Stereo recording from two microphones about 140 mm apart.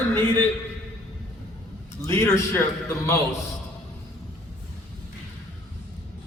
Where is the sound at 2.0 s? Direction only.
20° left (ahead or behind).